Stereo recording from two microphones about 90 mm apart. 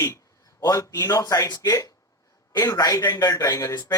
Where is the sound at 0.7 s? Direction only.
35° left (ahead or behind).